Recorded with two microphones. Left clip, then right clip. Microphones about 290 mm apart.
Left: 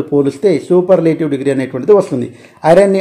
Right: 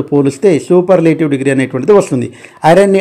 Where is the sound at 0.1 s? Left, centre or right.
Right.